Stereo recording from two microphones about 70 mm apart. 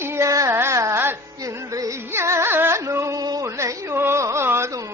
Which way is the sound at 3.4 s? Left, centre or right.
Right.